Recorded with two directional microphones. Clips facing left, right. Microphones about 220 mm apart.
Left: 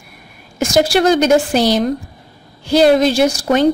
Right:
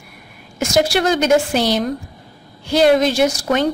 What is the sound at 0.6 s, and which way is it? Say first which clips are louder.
A woman's voice: left 3 dB; 35° left (ahead or behind).